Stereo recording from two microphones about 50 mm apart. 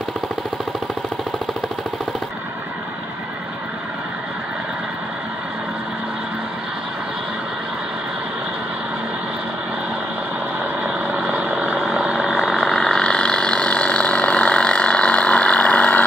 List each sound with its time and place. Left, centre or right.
11.1 s vehicle: right
12.4 s vehicle: centre; by 16.0 s left